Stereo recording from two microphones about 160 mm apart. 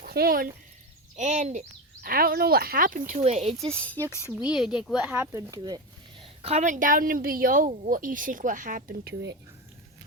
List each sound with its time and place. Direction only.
0.0 s speech: 70° right (ahead or behind)
1.1 s speech: 45° right (ahead or behind)
2.0 s speech: 65° right (ahead or behind)
3.2 s speech: 40° right (ahead or behind)
3.8 s speech: 10° left (ahead or behind)
4.4 s speech: 5° right (ahead or behind); by 5.8 s 25° right (ahead or behind)
6.4 s a woman's voice: 45° right (ahead or behind); by 9.3 s 70° right (ahead or behind)